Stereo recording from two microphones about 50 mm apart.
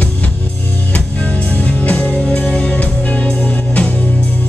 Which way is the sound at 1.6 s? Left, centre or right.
Left.